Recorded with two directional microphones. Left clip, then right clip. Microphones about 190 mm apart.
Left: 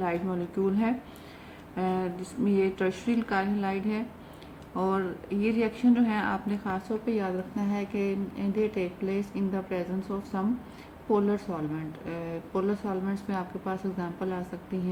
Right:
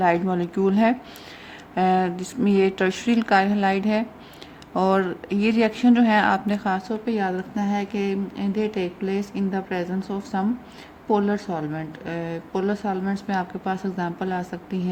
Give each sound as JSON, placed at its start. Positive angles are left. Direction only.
{"t": 0.0, "sound": "speech", "side_deg": -50}